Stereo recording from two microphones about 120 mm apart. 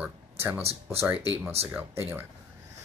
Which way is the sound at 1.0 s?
20° right (ahead or behind).